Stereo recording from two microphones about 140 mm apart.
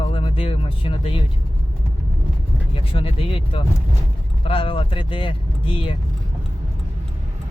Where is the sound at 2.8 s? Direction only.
40° left (ahead or behind).